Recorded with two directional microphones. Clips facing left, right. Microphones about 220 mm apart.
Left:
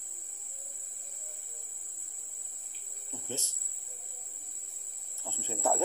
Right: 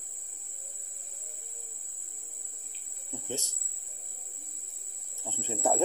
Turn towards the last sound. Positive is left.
turn(degrees=-20)  # may be behind; listen again after turning